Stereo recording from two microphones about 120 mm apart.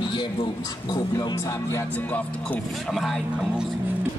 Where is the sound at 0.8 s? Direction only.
35° left (ahead or behind).